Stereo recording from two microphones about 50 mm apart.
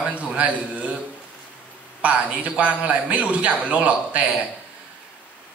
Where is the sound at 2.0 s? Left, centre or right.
Right.